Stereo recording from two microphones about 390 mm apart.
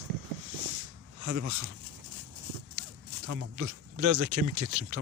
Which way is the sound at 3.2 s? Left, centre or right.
Right.